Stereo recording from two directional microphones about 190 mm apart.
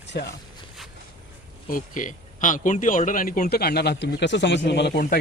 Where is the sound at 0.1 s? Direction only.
65° left (ahead or behind).